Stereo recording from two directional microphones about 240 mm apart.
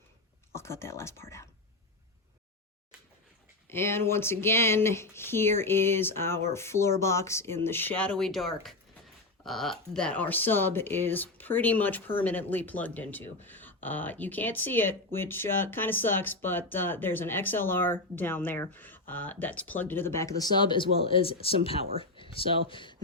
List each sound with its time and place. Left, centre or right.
0.5 s speech: centre
3.7 s speech: centre